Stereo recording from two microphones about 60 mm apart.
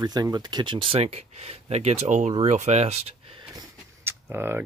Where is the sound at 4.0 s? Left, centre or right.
Right.